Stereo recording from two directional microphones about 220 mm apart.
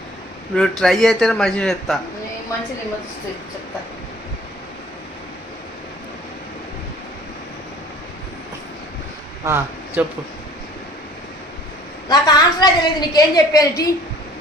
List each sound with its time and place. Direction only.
0.5 s a man's voice: centre (ahead or behind)
9.4 s speech: 10° right (ahead or behind)
12.0 s a woman's voice: 20° left (ahead or behind)